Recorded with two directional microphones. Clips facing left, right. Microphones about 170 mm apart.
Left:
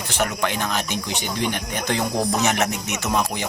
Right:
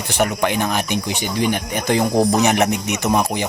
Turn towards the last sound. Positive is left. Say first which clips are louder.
# right 5 dB
turn(degrees=-15)  # may be behind; listen again after turning